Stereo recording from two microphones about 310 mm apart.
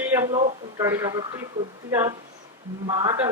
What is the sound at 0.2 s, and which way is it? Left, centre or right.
Speech, centre.